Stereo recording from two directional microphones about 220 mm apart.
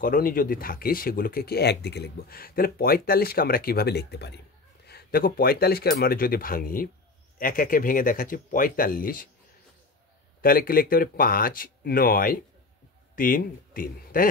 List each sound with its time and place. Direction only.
0.0 s speech: 40° left (ahead or behind)
10.4 s speech: 40° left (ahead or behind)